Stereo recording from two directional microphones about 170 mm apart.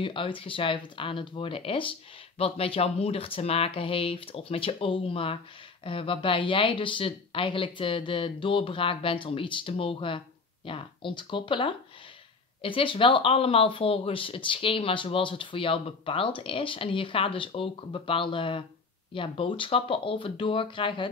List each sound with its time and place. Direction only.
0.0 s speech: 30° left (ahead or behind)